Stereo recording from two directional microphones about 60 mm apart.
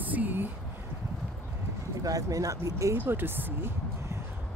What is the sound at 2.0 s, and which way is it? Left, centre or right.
Speech, right.